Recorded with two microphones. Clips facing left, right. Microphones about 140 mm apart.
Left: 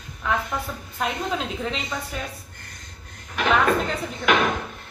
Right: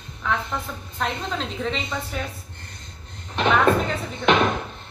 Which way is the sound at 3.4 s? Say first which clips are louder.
Right 2 dB; 25° right (ahead or behind).